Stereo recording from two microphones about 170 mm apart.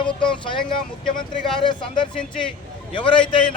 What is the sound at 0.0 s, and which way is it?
Speech, 30° left (ahead or behind).